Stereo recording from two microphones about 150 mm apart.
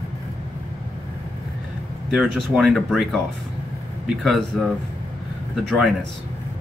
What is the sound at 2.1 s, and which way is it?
Speech, 5° right (ahead or behind).